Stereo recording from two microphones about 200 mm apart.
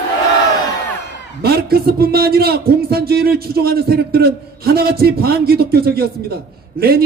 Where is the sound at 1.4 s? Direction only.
50° right (ahead or behind).